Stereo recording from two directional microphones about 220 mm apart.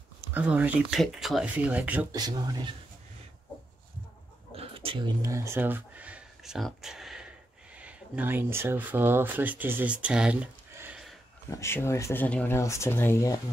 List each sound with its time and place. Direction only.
0.3 s speech: 5° right (ahead or behind)
2.1 s speech: 20° right (ahead or behind)
4.6 s speech: 25° right (ahead or behind); by 11.1 s 5° right (ahead or behind)
11.5 s speech: 10° left (ahead or behind)